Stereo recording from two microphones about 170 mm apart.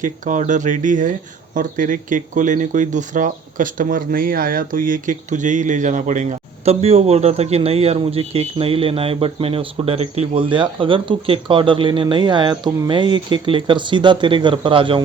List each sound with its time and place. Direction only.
0.0 s speech: 50° right (ahead or behind); by 15.0 s 30° right (ahead or behind)